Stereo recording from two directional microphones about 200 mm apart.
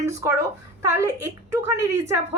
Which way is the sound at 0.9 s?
15° right (ahead or behind).